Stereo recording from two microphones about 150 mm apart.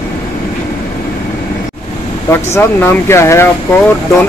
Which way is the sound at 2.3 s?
15° left (ahead or behind).